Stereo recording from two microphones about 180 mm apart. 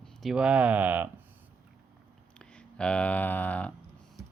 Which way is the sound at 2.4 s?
5° left (ahead or behind).